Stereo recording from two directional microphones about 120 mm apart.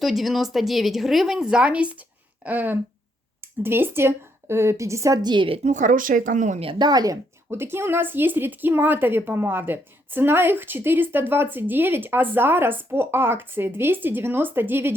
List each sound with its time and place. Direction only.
0.0 s a woman's voice: centre (ahead or behind); by 5.5 s 40° right (ahead or behind)
5.6 s speech: 90° right
6.6 s speech: 50° right (ahead or behind)
6.8 s speech: 30° right (ahead or behind)
7.5 s speech: 20° right (ahead or behind)